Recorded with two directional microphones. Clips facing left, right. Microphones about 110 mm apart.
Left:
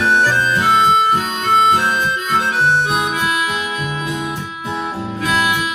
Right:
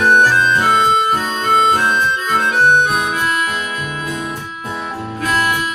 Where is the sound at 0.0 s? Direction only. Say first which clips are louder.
Right 3 dB; 50° right (ahead or behind).